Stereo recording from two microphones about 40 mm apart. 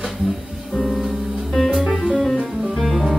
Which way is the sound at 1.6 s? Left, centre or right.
Centre.